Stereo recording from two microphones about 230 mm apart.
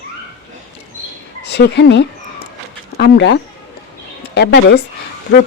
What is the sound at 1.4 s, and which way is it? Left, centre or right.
Speech, left.